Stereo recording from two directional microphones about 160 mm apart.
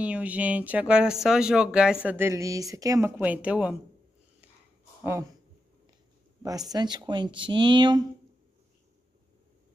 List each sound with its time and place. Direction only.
0.0 s speech: 10° right (ahead or behind)
6.4 s speech: 25° right (ahead or behind)